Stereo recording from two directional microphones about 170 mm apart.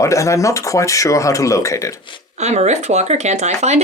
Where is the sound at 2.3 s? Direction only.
40° right (ahead or behind).